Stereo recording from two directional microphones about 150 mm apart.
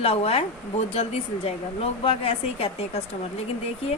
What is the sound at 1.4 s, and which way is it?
A woman's voice, 40° left (ahead or behind).